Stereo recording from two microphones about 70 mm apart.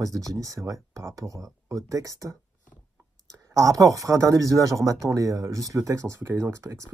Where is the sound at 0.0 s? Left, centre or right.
Right.